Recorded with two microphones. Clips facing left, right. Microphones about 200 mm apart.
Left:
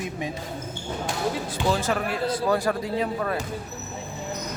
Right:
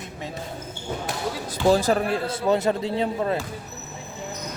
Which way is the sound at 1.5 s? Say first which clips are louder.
Right 9 dB; 40° right (ahead or behind).